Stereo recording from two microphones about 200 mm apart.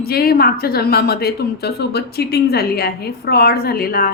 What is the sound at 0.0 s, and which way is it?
Speech, 50° left (ahead or behind).